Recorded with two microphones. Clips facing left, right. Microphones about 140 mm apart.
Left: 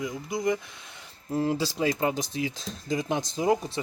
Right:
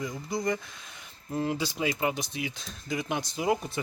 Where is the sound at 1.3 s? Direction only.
30° left (ahead or behind).